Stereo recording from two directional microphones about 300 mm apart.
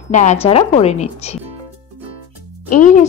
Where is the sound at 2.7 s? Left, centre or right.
Left.